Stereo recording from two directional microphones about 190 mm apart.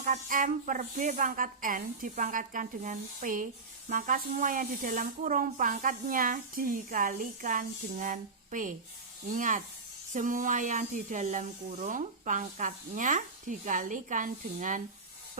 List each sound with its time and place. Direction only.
0.0 s speech: 45° right (ahead or behind)